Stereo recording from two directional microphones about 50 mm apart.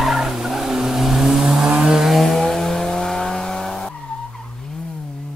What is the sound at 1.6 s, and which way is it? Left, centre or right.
Vehicle, right.